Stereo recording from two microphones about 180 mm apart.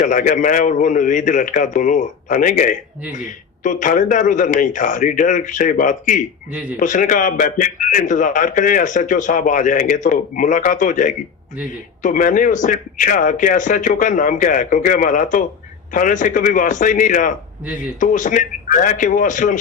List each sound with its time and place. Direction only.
0.0 s a man's voice: 45° left (ahead or behind)